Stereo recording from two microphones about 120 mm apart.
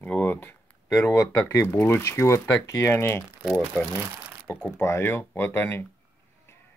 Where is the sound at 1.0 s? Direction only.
25° left (ahead or behind).